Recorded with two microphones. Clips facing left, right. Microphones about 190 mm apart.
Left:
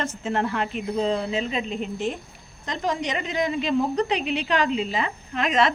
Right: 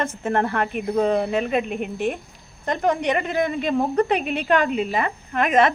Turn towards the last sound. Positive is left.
turn(degrees=-50)  # may be behind; listen again after turning